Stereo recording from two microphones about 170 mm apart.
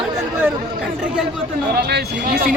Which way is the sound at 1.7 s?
70° right (ahead or behind).